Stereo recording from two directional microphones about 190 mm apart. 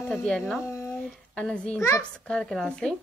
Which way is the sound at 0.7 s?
10° left (ahead or behind).